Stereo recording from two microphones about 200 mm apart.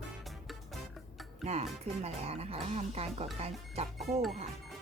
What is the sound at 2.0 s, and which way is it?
Speech, 30° right (ahead or behind).